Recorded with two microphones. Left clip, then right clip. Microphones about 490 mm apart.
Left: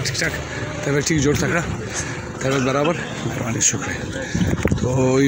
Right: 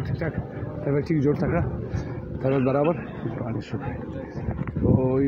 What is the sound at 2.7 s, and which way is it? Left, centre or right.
Speech, right.